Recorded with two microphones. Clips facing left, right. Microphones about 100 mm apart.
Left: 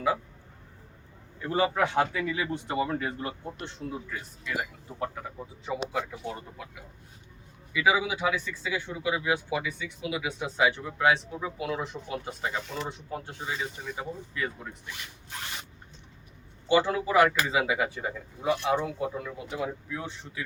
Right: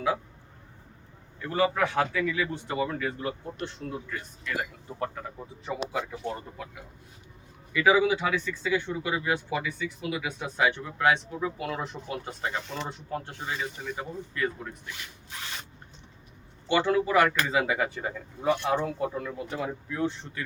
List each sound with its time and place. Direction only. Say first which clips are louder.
1.5 s speech: even; 25° left (ahead or behind)
3.8 s speech: even; 10° left (ahead or behind)
7.7 s speech: right 4 dB; 10° left (ahead or behind)
16.6 s speech: even; 10° left (ahead or behind)